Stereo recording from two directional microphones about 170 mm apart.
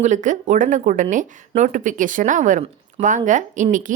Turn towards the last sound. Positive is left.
turn(degrees=-45)  # may be behind; listen again after turning